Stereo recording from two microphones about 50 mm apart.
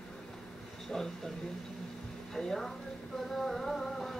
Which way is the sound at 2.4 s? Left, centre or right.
Centre.